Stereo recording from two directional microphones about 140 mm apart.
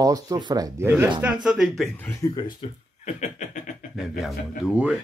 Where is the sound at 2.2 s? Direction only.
20° left (ahead or behind).